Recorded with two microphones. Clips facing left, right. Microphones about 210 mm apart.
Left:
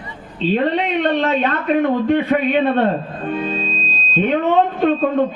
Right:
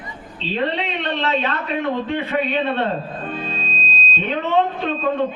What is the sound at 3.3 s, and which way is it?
Music, 55° left (ahead or behind).